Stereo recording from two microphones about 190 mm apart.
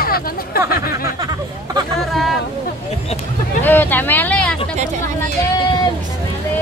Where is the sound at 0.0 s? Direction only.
50° left (ahead or behind).